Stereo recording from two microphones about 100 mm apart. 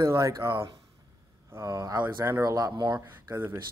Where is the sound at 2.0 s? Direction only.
25° right (ahead or behind); by 3.0 s 40° right (ahead or behind).